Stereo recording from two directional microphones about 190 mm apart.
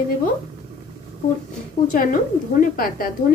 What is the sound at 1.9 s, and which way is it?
A woman's voice, 50° left (ahead or behind).